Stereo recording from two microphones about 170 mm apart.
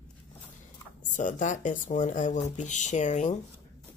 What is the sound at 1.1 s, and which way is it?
Speech, 50° left (ahead or behind).